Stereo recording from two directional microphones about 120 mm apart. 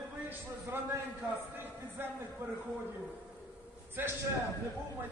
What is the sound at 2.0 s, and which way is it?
Speech, 15° right (ahead or behind).